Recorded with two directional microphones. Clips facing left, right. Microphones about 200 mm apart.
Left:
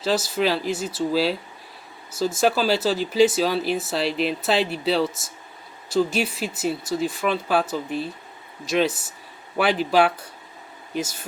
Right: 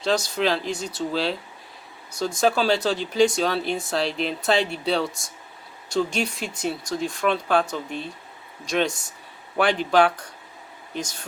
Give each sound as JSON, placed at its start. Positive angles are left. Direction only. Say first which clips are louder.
{"t": 0.0, "sound": "speech", "louder": "left 1 dB", "side_deg": 5}